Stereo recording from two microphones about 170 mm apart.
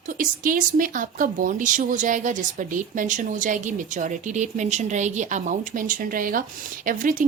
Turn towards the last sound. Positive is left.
turn(degrees=-50)  # may be behind; listen again after turning